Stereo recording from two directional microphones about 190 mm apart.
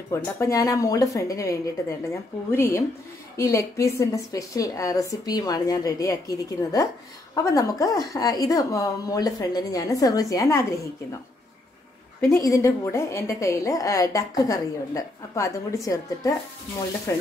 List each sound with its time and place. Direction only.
0.1 s a woman's voice: 15° left (ahead or behind)
12.4 s a woman's voice: 15° left (ahead or behind)